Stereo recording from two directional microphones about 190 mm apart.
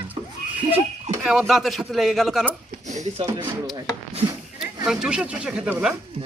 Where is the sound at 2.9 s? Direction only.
35° right (ahead or behind).